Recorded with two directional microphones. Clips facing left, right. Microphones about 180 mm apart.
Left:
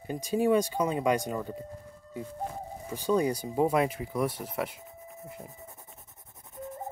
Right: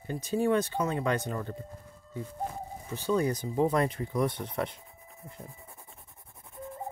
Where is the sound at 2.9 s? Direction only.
15° left (ahead or behind).